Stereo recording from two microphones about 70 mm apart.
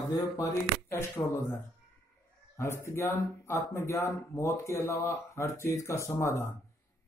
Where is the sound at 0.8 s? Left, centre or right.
Left.